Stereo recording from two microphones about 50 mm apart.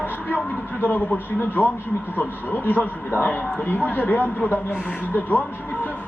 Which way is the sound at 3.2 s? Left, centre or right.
Left.